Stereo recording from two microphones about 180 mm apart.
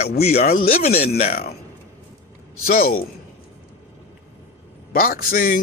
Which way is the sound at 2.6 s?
55° left (ahead or behind).